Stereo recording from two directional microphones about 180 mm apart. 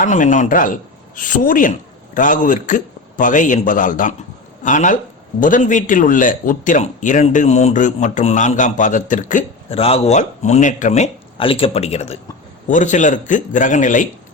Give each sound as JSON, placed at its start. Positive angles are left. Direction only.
{"t": 0.0, "sound": "a man's voice", "side_deg": 45}
{"t": 9.6, "sound": "a man's voice", "side_deg": 30}